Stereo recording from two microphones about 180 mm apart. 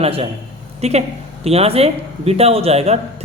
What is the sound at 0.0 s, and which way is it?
A man's voice, 35° right (ahead or behind).